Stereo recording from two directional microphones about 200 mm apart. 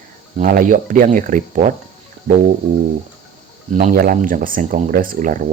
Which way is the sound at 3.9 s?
45° right (ahead or behind).